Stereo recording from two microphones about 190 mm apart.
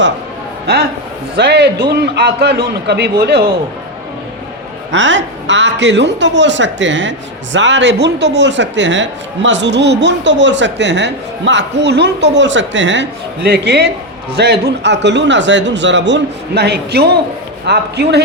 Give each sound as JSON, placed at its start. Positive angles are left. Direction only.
{"t": 0.7, "sound": "a man's voice", "side_deg": -55}
{"t": 4.9, "sound": "a man's voice", "side_deg": -75}